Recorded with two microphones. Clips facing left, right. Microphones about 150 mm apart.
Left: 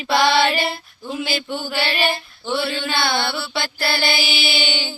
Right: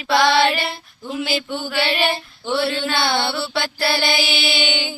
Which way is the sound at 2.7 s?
10° left (ahead or behind).